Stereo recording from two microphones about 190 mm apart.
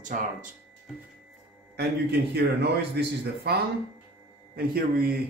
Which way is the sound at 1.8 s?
60° right (ahead or behind).